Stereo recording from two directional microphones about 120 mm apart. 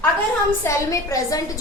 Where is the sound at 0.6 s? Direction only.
25° left (ahead or behind).